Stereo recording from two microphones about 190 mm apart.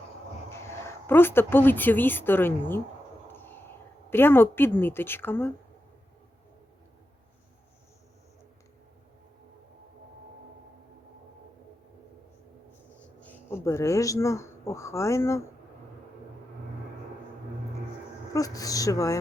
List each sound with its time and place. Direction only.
0.5 s speech: 15° left (ahead or behind)
3.3 s a sound: 10° left (ahead or behind)
4.1 s a woman's voice: 10° left (ahead or behind)
13.1 s speech: 10° left (ahead or behind)
18.3 s a woman's voice: 20° left (ahead or behind)